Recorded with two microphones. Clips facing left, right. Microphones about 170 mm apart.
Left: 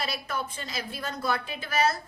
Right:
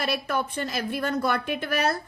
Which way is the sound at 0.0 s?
65° right (ahead or behind).